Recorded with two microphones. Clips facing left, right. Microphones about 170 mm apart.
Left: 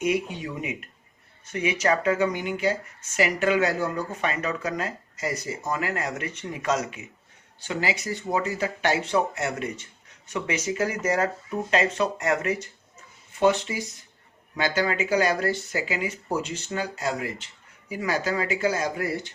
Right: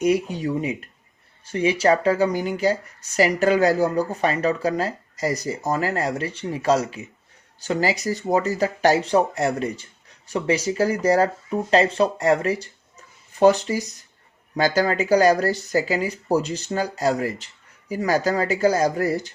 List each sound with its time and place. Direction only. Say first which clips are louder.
0.0 s speech: right 5 dB; 40° right (ahead or behind)